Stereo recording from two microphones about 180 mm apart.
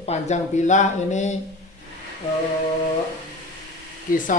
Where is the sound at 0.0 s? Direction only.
40° left (ahead or behind).